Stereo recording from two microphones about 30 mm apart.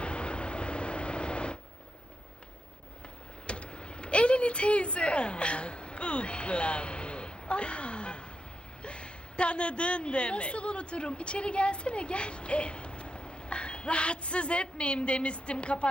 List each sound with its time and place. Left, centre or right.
0.0 s vehicle: left
3.4 s a sound: left
8.8 s a woman's voice: left